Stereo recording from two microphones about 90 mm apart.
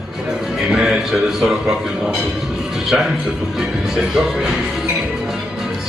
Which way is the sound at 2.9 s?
5° right (ahead or behind).